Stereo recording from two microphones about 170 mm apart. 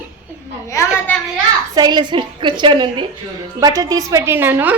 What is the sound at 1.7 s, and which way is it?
A woman's voice, 25° right (ahead or behind).